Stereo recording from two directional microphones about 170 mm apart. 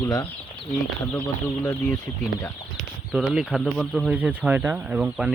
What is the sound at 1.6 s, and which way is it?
Speech, 5° left (ahead or behind).